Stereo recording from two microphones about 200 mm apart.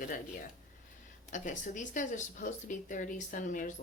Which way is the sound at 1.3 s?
40° left (ahead or behind).